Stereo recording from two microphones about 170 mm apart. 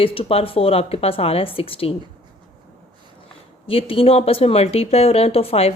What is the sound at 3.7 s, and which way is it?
Speech, 35° left (ahead or behind).